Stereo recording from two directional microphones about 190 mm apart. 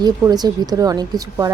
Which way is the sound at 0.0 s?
20° right (ahead or behind).